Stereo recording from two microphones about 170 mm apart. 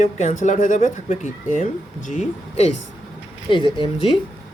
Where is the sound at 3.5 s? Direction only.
30° left (ahead or behind).